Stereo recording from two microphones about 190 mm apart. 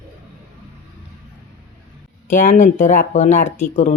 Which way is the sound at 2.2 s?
45° left (ahead or behind).